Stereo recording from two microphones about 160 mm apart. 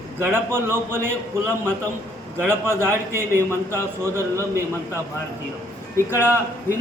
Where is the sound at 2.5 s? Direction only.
15° right (ahead or behind).